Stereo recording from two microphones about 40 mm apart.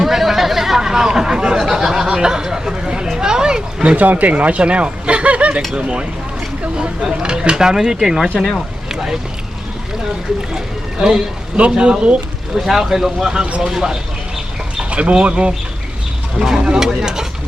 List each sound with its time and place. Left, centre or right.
0.0 s chatter: centre
3.9 s speech: right; by 8.3 s centre
8.4 s speech: centre
8.9 s boat: centre
11.7 s speech: right
12.5 s speech: centre
14.8 s bird: right
15.2 s speech: right